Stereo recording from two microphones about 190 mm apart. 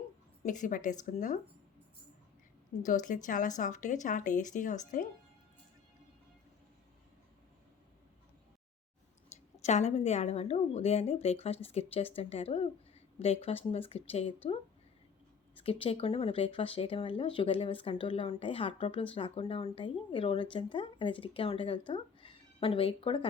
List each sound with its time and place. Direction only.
0.4 s a woman's voice: 40° left (ahead or behind)
2.8 s a woman's voice: 40° left (ahead or behind)
9.3 s a sound: 35° left (ahead or behind)
9.6 s a woman's voice: 35° left (ahead or behind)
15.6 s speech: 30° left (ahead or behind)